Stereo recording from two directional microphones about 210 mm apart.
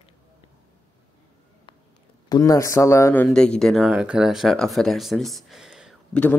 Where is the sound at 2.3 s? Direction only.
15° left (ahead or behind); by 6.2 s centre (ahead or behind).